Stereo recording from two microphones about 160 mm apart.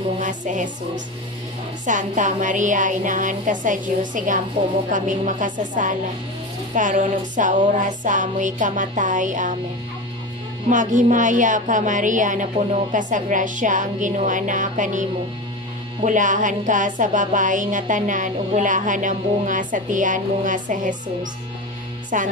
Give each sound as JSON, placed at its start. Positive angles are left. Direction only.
{"t": 0.2, "sound": "music", "side_deg": -50}
{"t": 10.7, "sound": "music", "side_deg": -50}